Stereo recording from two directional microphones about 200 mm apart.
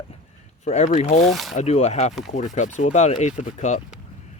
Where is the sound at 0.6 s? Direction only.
35° left (ahead or behind).